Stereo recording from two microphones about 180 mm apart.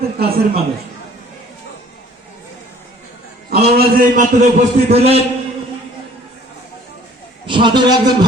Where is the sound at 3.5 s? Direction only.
60° right (ahead or behind).